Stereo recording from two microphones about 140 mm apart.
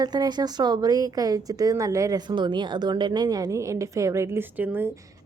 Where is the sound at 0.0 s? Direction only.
30° right (ahead or behind); by 4.9 s 15° right (ahead or behind).